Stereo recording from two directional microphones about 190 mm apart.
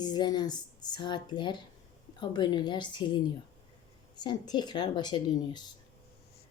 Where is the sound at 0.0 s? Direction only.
20° left (ahead or behind).